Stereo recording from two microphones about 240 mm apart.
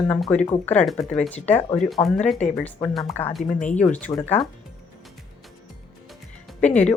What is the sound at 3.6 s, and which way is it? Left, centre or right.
Speech, left.